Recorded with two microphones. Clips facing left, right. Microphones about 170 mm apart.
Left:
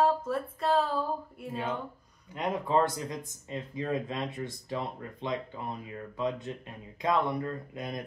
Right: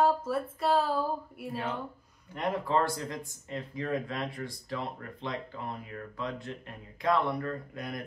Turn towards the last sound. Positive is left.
turn(degrees=20)  # may be behind; listen again after turning